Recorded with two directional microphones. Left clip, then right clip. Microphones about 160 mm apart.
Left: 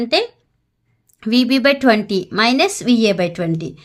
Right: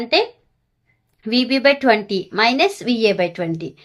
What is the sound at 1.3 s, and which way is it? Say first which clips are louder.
A woman's voice: left 1 dB; 40° left (ahead or behind).